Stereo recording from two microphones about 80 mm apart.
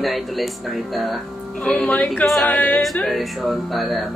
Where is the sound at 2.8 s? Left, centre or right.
Centre.